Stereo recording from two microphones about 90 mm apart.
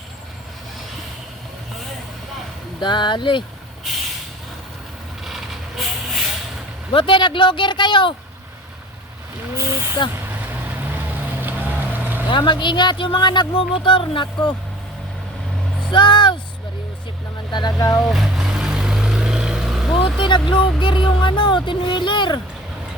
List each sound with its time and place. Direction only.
2.8 s speech: 60° left (ahead or behind)
5.2 s vehicle: centre (ahead or behind)
6.9 s speech: 65° left (ahead or behind)
10.0 s speech: 65° left (ahead or behind)
10.5 s vehicle: 20° right (ahead or behind)
12.3 s speech: 60° left (ahead or behind)
15.9 s speech: 60° left (ahead or behind)
17.5 s speech: 55° left (ahead or behind)
18.0 s vehicle: 5° right (ahead or behind)
20.1 s speech: 60° left (ahead or behind)